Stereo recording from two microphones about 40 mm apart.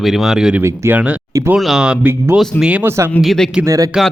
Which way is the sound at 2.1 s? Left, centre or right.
Right.